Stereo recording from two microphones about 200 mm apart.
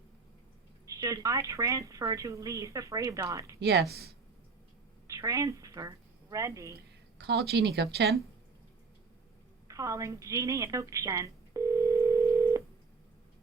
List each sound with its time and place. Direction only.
0.9 s speech: 15° right (ahead or behind)
3.6 s speech: 55° right (ahead or behind)
5.0 s a woman's voice: 15° right (ahead or behind)
6.7 s speech: 55° right (ahead or behind)
9.6 s a sound: 15° right (ahead or behind)